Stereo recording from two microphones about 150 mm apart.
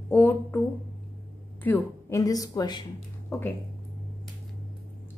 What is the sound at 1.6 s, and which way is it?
Speech, 15° left (ahead or behind).